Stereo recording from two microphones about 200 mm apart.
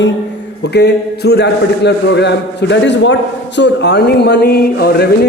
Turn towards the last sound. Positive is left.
turn(degrees=55)  # may be behind; listen again after turning